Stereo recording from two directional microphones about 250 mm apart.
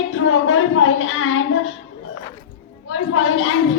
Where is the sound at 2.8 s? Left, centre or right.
Left.